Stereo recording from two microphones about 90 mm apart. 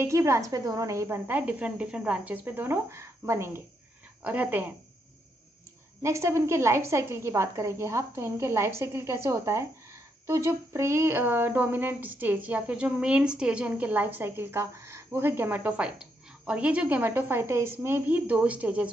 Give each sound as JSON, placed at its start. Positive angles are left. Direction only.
{"t": 0.0, "sound": "speech", "side_deg": -35}
{"t": 4.2, "sound": "speech", "side_deg": -20}
{"t": 6.0, "sound": "a woman's voice", "side_deg": -30}